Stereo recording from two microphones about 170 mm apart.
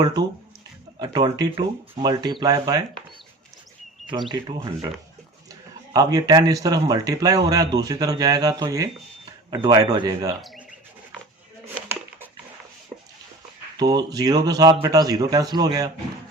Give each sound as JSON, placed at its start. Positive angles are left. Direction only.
{"t": 0.0, "sound": "speech", "side_deg": -25}
{"t": 4.3, "sound": "speech", "side_deg": -25}
{"t": 5.9, "sound": "speech", "side_deg": -20}
{"t": 13.7, "sound": "speech", "side_deg": -25}